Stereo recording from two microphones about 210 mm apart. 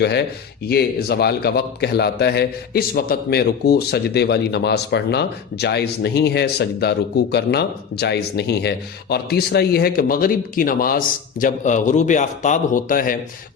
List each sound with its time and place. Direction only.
0.0 s a man's voice: 50° left (ahead or behind)